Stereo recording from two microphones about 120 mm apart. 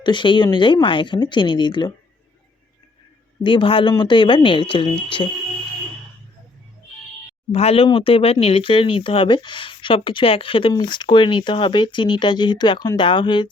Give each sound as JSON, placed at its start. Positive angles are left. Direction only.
{"t": 0.0, "sound": "speech", "side_deg": 40}
{"t": 3.4, "sound": "speech", "side_deg": 45}
{"t": 7.5, "sound": "speech", "side_deg": 60}
{"t": 7.9, "sound": "speech", "side_deg": 50}